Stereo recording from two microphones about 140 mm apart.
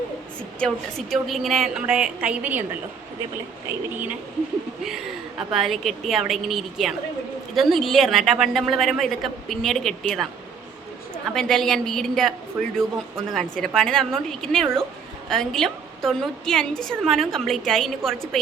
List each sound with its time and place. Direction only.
0.6 s a woman's voice: centre (ahead or behind)
4.9 s a woman's voice: 5° right (ahead or behind)
11.3 s a woman's voice: 5° left (ahead or behind)